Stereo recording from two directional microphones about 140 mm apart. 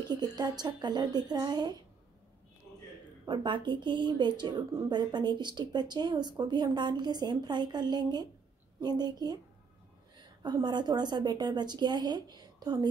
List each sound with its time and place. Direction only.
0.1 s speech: 30° right (ahead or behind)
3.3 s a woman's voice: 35° right (ahead or behind)